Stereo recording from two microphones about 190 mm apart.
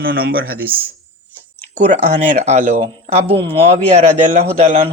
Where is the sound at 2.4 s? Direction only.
40° right (ahead or behind).